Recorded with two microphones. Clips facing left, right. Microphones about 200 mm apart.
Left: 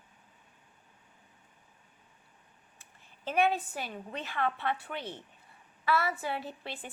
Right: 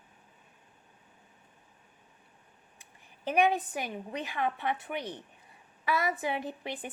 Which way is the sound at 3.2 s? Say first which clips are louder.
Right 2 dB; 15° right (ahead or behind).